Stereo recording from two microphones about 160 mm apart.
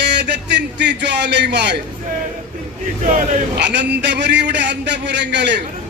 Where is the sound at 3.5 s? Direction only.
90° right.